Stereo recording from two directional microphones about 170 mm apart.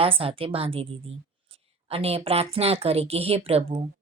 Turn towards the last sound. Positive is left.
turn(degrees=-35)  # may be behind; listen again after turning